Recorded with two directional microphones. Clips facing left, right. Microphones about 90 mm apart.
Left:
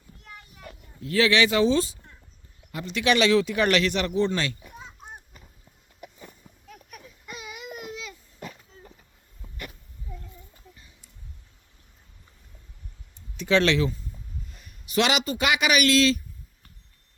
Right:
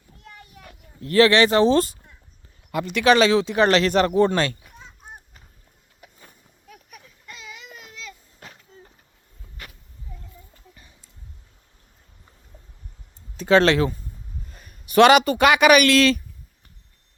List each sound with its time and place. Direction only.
1.0 s speech: 55° right (ahead or behind)
1.3 s speech: 40° right (ahead or behind)
2.7 s speech: 65° right (ahead or behind)
3.0 s speech: 35° right (ahead or behind)
6.7 s a sound: 5° right (ahead or behind)
7.3 s baby cry: 15° left (ahead or behind)
13.3 s a man's voice: 40° right (ahead or behind); by 16.2 s 55° right (ahead or behind)